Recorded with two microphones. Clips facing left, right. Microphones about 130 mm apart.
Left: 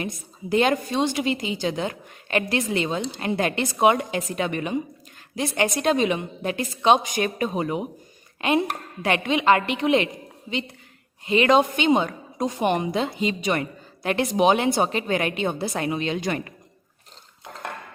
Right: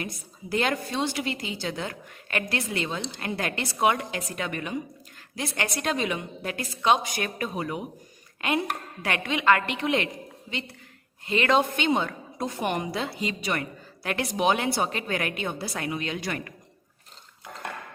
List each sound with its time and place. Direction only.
0.5 s a woman's voice: 20° left (ahead or behind)
11.3 s a woman's voice: 15° left (ahead or behind)